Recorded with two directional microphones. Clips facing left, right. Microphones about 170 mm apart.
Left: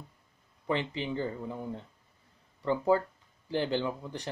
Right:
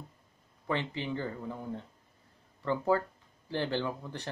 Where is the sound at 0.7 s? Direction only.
20° left (ahead or behind).